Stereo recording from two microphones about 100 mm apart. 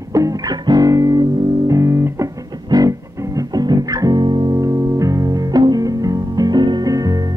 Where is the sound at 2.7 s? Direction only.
40° right (ahead or behind).